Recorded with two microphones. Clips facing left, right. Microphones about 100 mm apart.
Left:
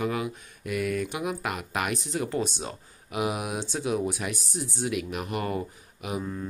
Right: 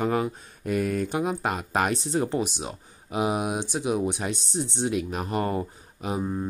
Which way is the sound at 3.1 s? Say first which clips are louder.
Right 3 dB; 25° right (ahead or behind).